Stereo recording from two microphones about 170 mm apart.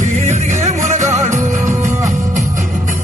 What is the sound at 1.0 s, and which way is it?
Music, 20° right (ahead or behind).